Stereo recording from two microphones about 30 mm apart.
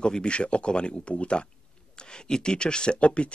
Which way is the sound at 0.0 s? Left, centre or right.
Left.